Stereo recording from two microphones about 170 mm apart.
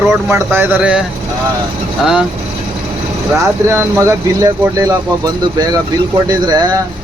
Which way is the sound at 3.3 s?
15° right (ahead or behind).